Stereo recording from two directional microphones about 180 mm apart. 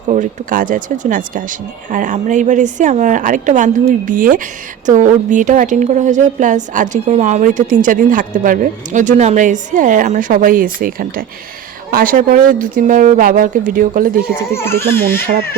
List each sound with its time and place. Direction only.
0.1 s a woman's voice: 45° right (ahead or behind)
14.5 s speech: 15° left (ahead or behind)